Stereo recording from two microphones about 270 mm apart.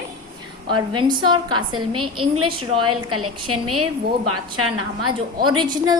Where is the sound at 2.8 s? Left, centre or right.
Right.